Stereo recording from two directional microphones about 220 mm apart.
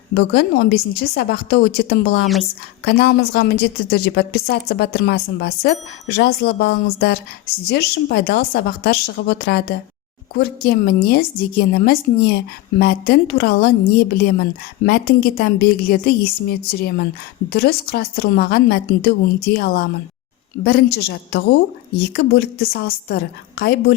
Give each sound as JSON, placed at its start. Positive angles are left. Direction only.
{"t": 0.1, "sound": "speech", "side_deg": 50}
{"t": 2.2, "sound": "a woman's voice", "side_deg": 0}
{"t": 2.8, "sound": "speech", "side_deg": 45}